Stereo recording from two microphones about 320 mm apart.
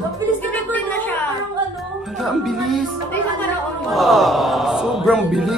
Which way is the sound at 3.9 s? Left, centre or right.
Centre.